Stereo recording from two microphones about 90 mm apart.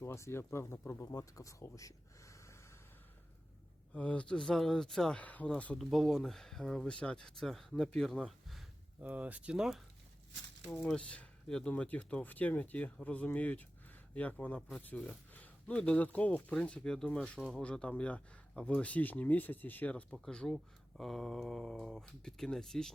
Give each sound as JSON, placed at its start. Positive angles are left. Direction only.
{"t": 0.0, "sound": "speech", "side_deg": 30}
{"t": 3.9, "sound": "speech", "side_deg": 15}
{"t": 5.2, "sound": "speech", "side_deg": 15}
{"t": 5.8, "sound": "speech", "side_deg": 0}
{"t": 9.0, "sound": "speech", "side_deg": -20}
{"t": 10.8, "sound": "speech", "side_deg": 15}
{"t": 20.1, "sound": "speech", "side_deg": 5}